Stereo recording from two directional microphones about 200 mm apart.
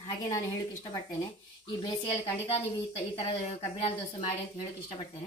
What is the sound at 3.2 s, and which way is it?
Speech, 30° left (ahead or behind).